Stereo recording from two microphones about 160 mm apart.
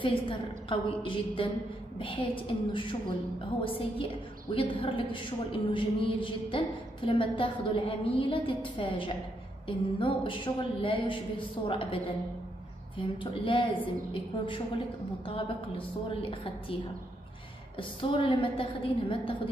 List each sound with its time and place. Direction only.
0.0 s a woman's voice: 35° left (ahead or behind)
17.7 s a woman's voice: 35° left (ahead or behind)